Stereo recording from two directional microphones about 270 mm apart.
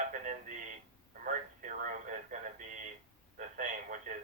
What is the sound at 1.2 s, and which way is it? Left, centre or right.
Telephone, right.